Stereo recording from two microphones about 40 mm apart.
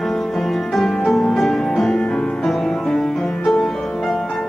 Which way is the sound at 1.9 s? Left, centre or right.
Left.